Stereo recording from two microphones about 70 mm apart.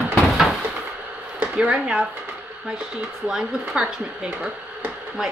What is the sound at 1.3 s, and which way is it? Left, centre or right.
Speech, centre.